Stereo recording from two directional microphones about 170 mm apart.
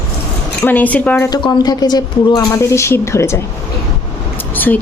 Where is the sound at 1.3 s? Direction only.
25° left (ahead or behind).